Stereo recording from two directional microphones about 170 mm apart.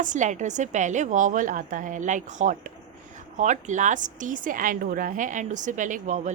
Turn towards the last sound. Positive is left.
turn(degrees=-45)  # may be behind; listen again after turning